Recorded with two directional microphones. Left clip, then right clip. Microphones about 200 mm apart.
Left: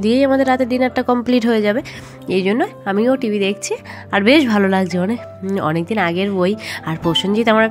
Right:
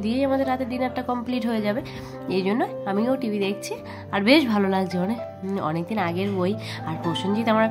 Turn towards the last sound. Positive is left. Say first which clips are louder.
# left 7 dB
turn(degrees=30)  # may be behind; listen again after turning